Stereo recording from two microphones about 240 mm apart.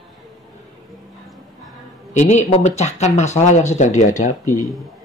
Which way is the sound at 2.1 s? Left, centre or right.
Left.